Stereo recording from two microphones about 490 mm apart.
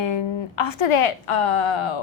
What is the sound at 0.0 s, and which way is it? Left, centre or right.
A woman's voice, left.